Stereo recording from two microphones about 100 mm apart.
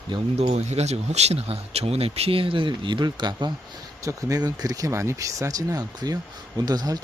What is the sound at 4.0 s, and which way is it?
Speech, 30° right (ahead or behind).